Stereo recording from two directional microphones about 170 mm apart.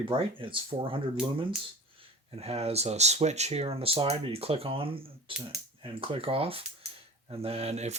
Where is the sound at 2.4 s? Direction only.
35° right (ahead or behind).